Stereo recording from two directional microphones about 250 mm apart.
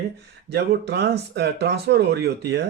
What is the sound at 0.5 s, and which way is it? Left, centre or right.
Speech, right.